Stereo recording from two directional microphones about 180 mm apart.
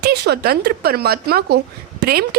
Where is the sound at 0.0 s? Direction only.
65° right (ahead or behind).